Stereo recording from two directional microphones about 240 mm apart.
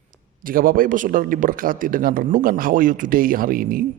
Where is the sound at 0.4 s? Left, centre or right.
Right.